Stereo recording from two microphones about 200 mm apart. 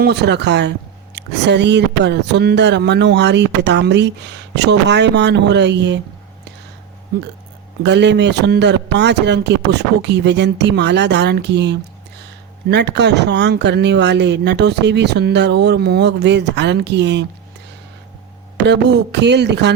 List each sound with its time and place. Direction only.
0.0 s speech: 55° right (ahead or behind)
7.9 s speech: 60° right (ahead or behind)
18.5 s speech: 60° right (ahead or behind)